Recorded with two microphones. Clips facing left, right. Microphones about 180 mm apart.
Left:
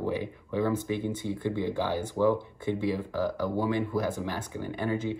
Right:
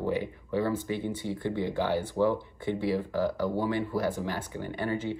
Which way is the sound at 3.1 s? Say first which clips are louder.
Right 1 dB; 15° right (ahead or behind).